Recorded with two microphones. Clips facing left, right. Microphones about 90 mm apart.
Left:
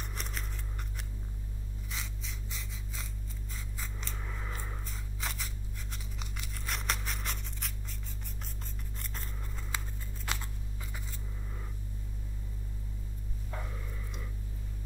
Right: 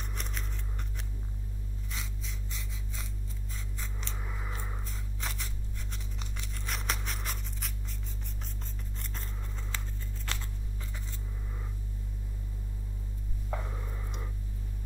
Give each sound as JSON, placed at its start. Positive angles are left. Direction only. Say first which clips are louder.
{"t": 0.0, "sound": "scissors", "louder": "even", "side_deg": 0}
{"t": 1.9, "sound": "rub", "louder": "even", "side_deg": 0}
{"t": 3.5, "sound": "scissors", "louder": "even", "side_deg": 0}
{"t": 4.2, "sound": "scissors", "louder": "right 1 dB", "side_deg": -10}
{"t": 4.8, "sound": "a sound", "louder": "even", "side_deg": 0}
{"t": 9.0, "sound": "scissors", "louder": "even", "side_deg": 0}
{"t": 10.2, "sound": "scissors", "louder": "left 2 dB", "side_deg": 15}
{"t": 13.7, "sound": "a sound", "louder": "right 2 dB", "side_deg": -30}